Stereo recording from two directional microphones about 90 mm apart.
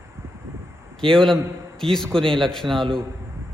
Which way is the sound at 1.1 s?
5° left (ahead or behind).